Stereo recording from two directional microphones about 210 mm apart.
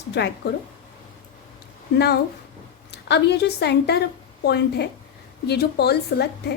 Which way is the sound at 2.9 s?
55° left (ahead or behind).